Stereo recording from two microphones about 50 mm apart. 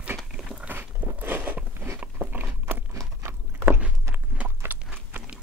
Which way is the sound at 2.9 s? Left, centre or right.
Right.